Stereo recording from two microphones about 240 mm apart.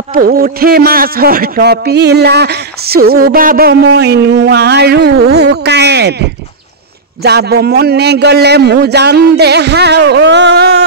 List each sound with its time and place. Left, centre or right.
0.1 s a man's voice: right
7.2 s a man's voice: right